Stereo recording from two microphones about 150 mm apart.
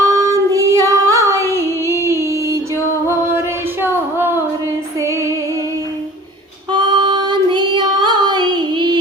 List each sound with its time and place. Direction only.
0.0 s female singing: 20° right (ahead or behind)
3.3 s a sound: 15° right (ahead or behind)
4.9 s music: 20° right (ahead or behind)
6.7 s child singing: 30° right (ahead or behind)